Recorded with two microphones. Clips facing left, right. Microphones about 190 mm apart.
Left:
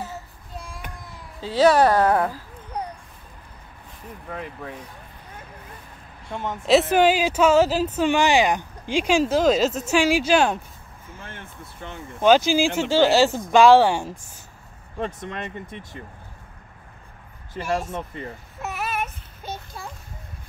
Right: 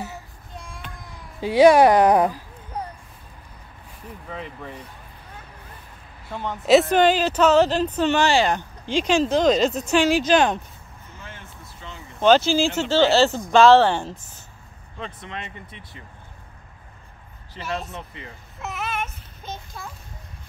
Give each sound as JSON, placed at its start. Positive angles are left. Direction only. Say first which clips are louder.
{"t": 1.4, "sound": "speech", "louder": "right 4 dB", "side_deg": -15}
{"t": 4.3, "sound": "speech", "louder": "left 1 dB", "side_deg": 5}
{"t": 6.6, "sound": "speech", "louder": "right 1 dB", "side_deg": 0}
{"t": 11.1, "sound": "vehicle", "louder": "left 2 dB", "side_deg": 55}
{"t": 12.2, "sound": "speech", "louder": "even", "side_deg": 10}
{"t": 15.0, "sound": "speech", "louder": "left 5 dB", "side_deg": 45}
{"t": 17.6, "sound": "speech", "louder": "left 4 dB", "side_deg": 45}
{"t": 18.8, "sound": "child singing", "louder": "left 1 dB", "side_deg": 5}